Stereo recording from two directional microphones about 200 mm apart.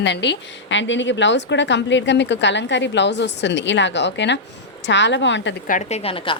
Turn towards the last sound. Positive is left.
turn(degrees=25)  # may be behind; listen again after turning